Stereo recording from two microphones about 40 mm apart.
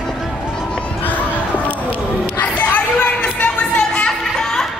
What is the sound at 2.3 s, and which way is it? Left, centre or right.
Music, left.